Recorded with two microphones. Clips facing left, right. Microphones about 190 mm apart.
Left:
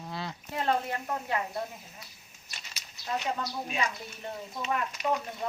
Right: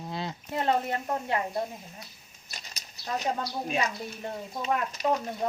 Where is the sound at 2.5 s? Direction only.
40° right (ahead or behind).